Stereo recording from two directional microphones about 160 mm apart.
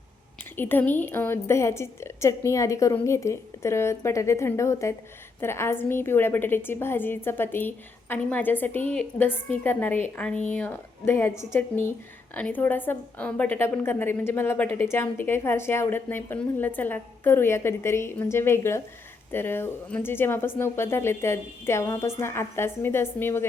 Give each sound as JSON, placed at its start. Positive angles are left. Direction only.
{"t": 0.5, "sound": "a woman's voice", "side_deg": 10}